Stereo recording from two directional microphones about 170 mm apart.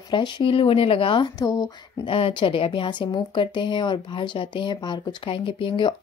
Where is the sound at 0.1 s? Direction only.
25° left (ahead or behind).